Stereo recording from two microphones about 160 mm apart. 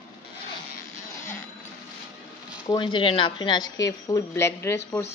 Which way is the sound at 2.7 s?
30° left (ahead or behind).